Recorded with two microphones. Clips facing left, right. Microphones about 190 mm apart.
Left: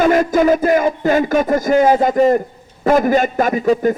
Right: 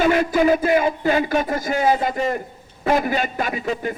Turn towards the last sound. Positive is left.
turn(degrees=45)  # may be behind; listen again after turning